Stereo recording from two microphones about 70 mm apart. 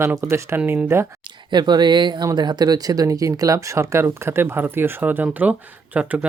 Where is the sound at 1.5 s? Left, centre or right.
Right.